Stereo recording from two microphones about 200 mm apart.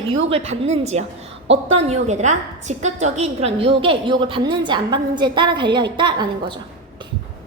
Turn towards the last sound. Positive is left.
turn(degrees=-25)  # may be behind; listen again after turning